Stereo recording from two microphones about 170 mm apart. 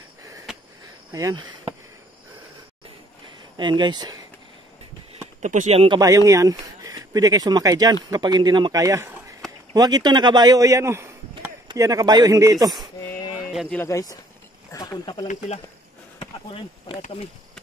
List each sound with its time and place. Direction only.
0.5 s a sound: 5° right (ahead or behind)
1.1 s speech: 20° right (ahead or behind)
3.5 s speech: 25° right (ahead or behind)
5.4 s speech: 45° right (ahead or behind)
5.9 s a man's voice: 20° right (ahead or behind)
13.5 s speech: centre (ahead or behind)
13.7 s speech: 20° left (ahead or behind)
16.2 s chop: 30° left (ahead or behind)